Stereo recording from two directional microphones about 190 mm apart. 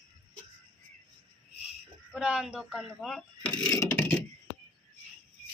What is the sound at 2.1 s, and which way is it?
Speech, 5° right (ahead or behind).